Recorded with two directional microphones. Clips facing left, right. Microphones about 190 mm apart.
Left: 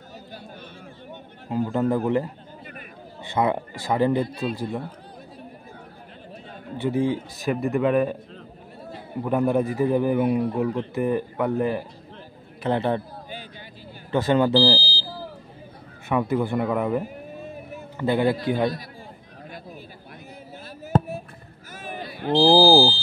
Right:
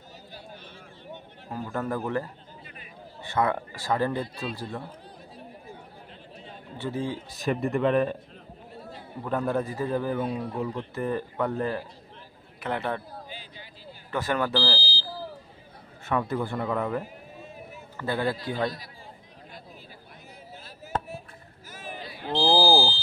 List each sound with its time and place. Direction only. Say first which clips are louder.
1.5 s a man's voice: left 8 dB; 20° left (ahead or behind)
3.3 s a man's voice: left 3 dB; 20° left (ahead or behind)
6.8 s a man's voice: left 8 dB; 15° left (ahead or behind)
7.4 s a man's voice: left 2 dB; 5° left (ahead or behind)
9.2 s a man's voice: left 6 dB; 15° left (ahead or behind)
12.6 s a man's voice: left 7 dB; 30° left (ahead or behind)
14.1 s a man's voice: left 8 dB; 25° left (ahead or behind)
16.1 s a man's voice: left 5 dB; 10° left (ahead or behind)
20.6 s fireworks: left 9 dB; 55° left (ahead or behind)
21.7 s a sound: left 5 dB; 55° left (ahead or behind)
22.3 s speech: left 6 dB; 35° left (ahead or behind)